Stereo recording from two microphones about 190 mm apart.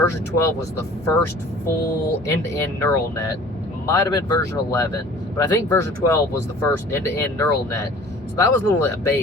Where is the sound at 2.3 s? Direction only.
15° left (ahead or behind).